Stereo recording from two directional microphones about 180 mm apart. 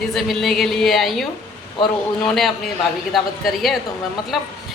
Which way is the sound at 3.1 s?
Centre (ahead or behind).